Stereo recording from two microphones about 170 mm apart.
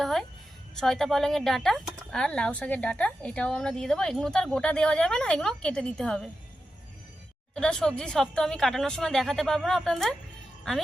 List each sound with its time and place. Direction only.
0.0 s a sound: centre (ahead or behind)
0.8 s speech: centre (ahead or behind)
7.5 s speech: 5° left (ahead or behind)